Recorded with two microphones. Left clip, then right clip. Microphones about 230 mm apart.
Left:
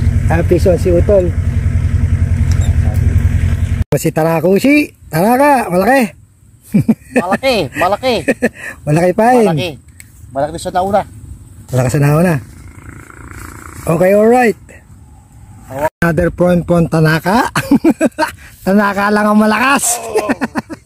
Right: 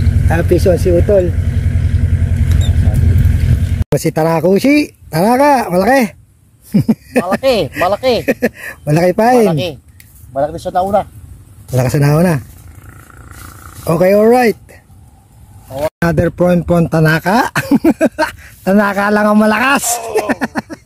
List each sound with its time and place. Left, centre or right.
0.0 s vehicle: centre
3.8 s speech: centre
13.8 s speech: centre